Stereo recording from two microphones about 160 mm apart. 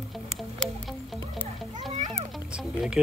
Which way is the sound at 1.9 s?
45° right (ahead or behind).